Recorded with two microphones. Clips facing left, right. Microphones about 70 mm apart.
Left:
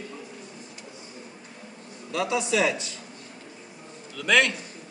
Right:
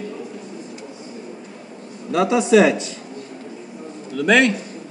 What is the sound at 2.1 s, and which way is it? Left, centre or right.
Speech, right.